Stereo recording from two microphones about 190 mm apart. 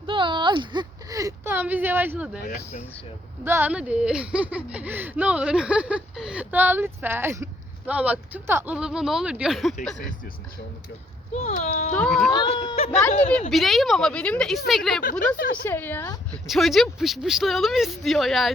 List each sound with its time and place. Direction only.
0.0 s a sound: 25° right (ahead or behind); by 2.4 s 5° right (ahead or behind)
3.4 s speech: 10° right (ahead or behind)
11.3 s speech: 35° left (ahead or behind)
11.9 s speech: 5° left (ahead or behind)
12.3 s speech: 25° left (ahead or behind)
13.5 s speech: centre (ahead or behind)
15.4 s a woman's voice: 50° left (ahead or behind)
15.6 s speech: 10° left (ahead or behind)
16.5 s speech: centre (ahead or behind)